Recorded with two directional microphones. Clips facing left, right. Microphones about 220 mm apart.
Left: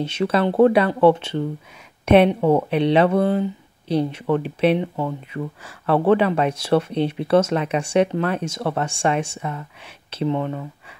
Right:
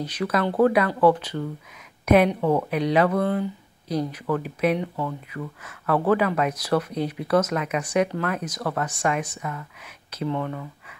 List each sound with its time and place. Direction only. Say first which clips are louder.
0.0 s speech: left 4 dB; 25° left (ahead or behind)